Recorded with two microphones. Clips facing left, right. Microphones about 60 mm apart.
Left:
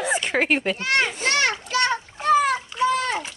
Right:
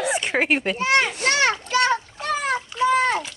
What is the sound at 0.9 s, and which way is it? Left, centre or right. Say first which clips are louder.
Children playing: right 2 dB; centre.